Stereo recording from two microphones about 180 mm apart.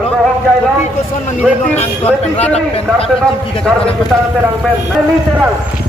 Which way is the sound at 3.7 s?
5° left (ahead or behind).